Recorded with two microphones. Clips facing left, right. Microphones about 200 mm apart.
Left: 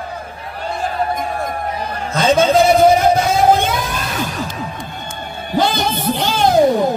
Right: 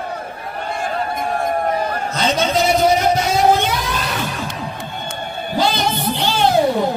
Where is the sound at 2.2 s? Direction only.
50° left (ahead or behind).